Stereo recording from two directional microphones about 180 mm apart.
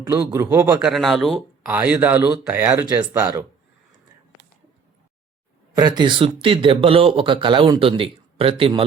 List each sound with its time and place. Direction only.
0.0 s speech: 15° right (ahead or behind); by 1.4 s centre (ahead or behind)
1.6 s speech: 10° right (ahead or behind)
5.7 s speech: 25° right (ahead or behind)